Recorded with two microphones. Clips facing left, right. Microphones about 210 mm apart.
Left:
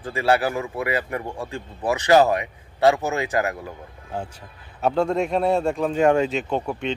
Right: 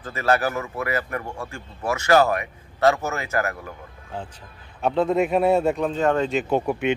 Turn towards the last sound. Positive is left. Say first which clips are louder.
# right 4 dB
turn(degrees=-10)  # may be behind; listen again after turning